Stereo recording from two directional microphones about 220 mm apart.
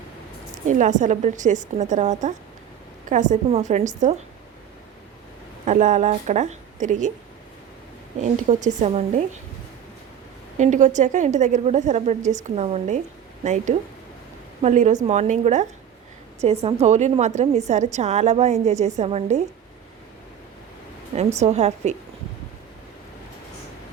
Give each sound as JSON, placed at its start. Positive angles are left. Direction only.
{"t": 0.6, "sound": "a woman's voice", "side_deg": -35}
{"t": 5.6, "sound": "a woman's voice", "side_deg": -35}
{"t": 8.2, "sound": "a woman's voice", "side_deg": -35}
{"t": 10.6, "sound": "a woman's voice", "side_deg": -35}
{"t": 21.3, "sound": "a woman's voice", "side_deg": -30}